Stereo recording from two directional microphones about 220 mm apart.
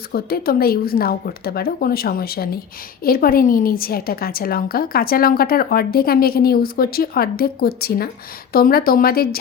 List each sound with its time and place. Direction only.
0.1 s a woman's voice: 45° left (ahead or behind)